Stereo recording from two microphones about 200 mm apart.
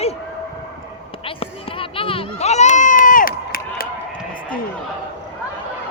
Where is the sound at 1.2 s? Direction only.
25° left (ahead or behind); by 3.8 s 45° left (ahead or behind).